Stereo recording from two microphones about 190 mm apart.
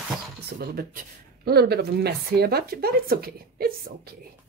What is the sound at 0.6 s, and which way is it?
Speech, 55° right (ahead or behind).